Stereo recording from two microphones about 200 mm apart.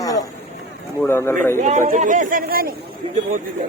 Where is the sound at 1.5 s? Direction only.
35° right (ahead or behind).